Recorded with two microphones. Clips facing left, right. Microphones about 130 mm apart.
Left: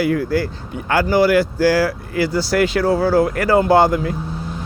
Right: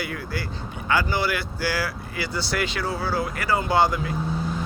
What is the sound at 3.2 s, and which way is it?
Speech, 90° left.